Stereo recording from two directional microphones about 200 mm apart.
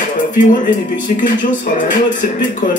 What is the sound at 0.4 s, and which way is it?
Speech, 40° left (ahead or behind).